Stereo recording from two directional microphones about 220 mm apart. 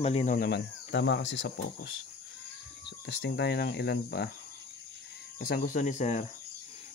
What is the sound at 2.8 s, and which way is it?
Speech, 50° left (ahead or behind).